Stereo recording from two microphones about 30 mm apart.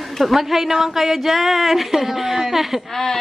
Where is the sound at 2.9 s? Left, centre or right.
Centre.